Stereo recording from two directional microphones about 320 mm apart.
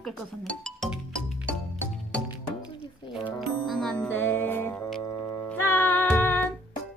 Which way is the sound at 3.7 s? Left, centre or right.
Centre.